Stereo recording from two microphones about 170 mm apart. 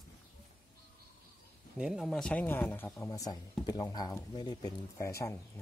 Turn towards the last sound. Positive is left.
turn(degrees=15)  # may be behind; listen again after turning